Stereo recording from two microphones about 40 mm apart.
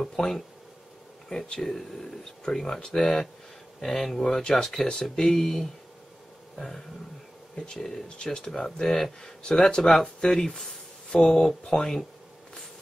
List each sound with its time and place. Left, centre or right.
0.0 s speech: centre
1.6 s speech: centre
6.5 s roaring cats: centre
7.5 s speech: centre
8.2 s speech: left
9.4 s speech: left